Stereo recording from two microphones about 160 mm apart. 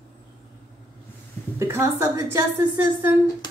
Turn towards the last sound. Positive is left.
turn(degrees=-15)  # may be behind; listen again after turning